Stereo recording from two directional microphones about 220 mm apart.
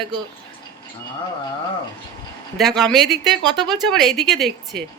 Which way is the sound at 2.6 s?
Centre (ahead or behind).